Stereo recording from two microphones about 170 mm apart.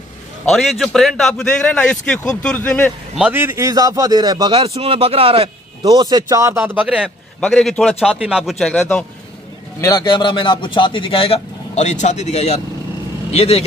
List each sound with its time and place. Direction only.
0.5 s a man's voice: centre (ahead or behind)
3.2 s a man's voice: 10° right (ahead or behind)
7.3 s a man's voice: 5° left (ahead or behind)
9.8 s a man's voice: 20° left (ahead or behind); by 13.7 s 35° left (ahead or behind)